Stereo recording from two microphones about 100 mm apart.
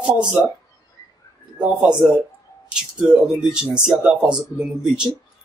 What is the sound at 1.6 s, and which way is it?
Speech, 10° right (ahead or behind).